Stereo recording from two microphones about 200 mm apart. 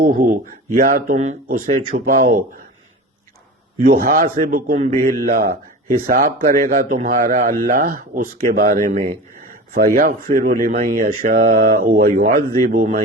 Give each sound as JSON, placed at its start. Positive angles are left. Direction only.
{"t": 0.0, "sound": "a man's voice", "side_deg": -45}
{"t": 3.8, "sound": "a man's voice", "side_deg": -45}